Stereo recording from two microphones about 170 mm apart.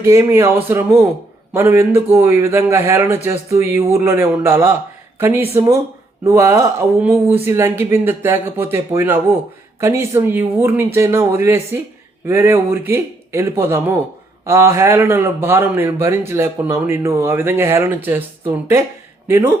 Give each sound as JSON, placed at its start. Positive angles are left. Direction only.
{"t": 0.0, "sound": "a man's voice", "side_deg": -15}